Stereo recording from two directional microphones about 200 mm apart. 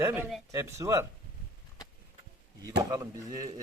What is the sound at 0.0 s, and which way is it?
Speech, 10° right (ahead or behind).